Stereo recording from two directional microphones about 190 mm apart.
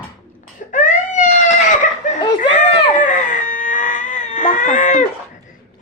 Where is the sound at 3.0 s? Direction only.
45° left (ahead or behind).